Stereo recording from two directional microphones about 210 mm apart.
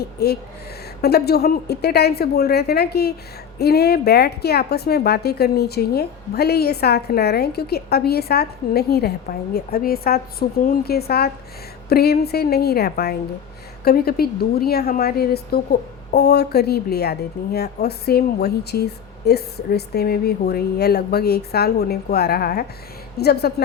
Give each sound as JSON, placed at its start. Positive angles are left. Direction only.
{"t": 0.0, "sound": "a woman's voice", "side_deg": 50}